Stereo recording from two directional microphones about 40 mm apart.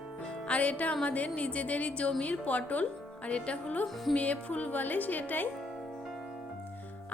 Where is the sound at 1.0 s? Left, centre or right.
Left.